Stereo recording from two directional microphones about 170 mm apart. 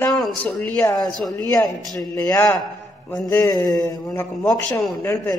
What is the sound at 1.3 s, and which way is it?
A man's voice, 20° left (ahead or behind).